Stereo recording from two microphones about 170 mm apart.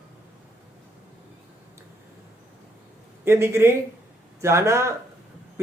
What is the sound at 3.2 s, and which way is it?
A man's voice, 15° right (ahead or behind).